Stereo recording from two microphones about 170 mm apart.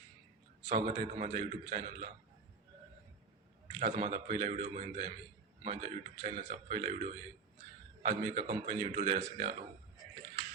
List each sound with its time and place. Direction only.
0.7 s a man's voice: 40° right (ahead or behind)
3.8 s a man's voice: 40° right (ahead or behind)